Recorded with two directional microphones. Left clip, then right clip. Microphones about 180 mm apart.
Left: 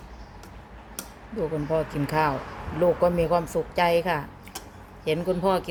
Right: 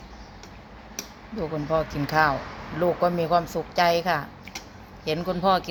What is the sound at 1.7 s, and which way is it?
Speech, 15° left (ahead or behind).